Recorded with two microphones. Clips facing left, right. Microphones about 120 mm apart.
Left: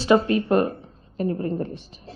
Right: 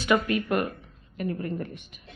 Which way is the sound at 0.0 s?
30° left (ahead or behind).